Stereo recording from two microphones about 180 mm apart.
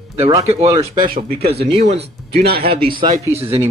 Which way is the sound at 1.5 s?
35° right (ahead or behind).